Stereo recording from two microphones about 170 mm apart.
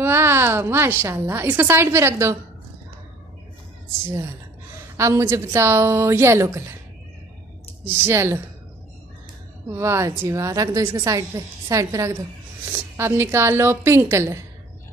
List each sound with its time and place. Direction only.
0.0 s a woman's voice: 15° right (ahead or behind)
4.9 s a woman's voice: 15° right (ahead or behind)
7.8 s a woman's voice: 15° right (ahead or behind)
9.7 s a woman's voice: 15° right (ahead or behind)